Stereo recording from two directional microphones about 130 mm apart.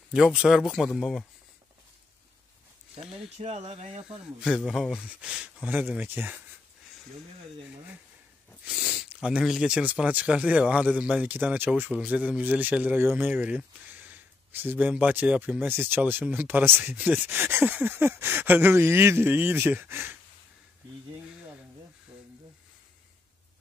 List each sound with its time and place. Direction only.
0.1 s speech: 5° right (ahead or behind)
3.3 s speech: 60° right (ahead or behind)
4.4 s speech: 5° right (ahead or behind)
8.6 s speech: 5° right (ahead or behind)